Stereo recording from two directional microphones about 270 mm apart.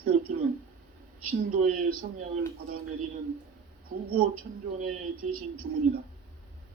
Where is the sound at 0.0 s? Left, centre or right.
Right.